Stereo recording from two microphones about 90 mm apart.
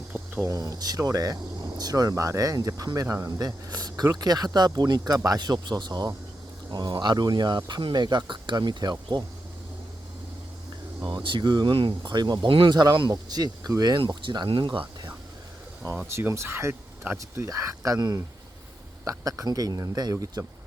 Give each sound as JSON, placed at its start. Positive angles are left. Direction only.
{"t": 0.4, "sound": "speech", "side_deg": -40}
{"t": 11.0, "sound": "speech", "side_deg": -65}
{"t": 11.7, "sound": "speech", "side_deg": -65}
{"t": 12.5, "sound": "speech", "side_deg": -75}
{"t": 12.7, "sound": "speech", "side_deg": -55}
{"t": 14.1, "sound": "speech", "side_deg": -60}
{"t": 16.1, "sound": "speech", "side_deg": -30}